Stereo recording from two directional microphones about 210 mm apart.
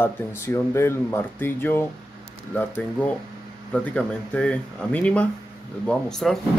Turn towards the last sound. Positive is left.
turn(degrees=0)  # may be behind; listen again after turning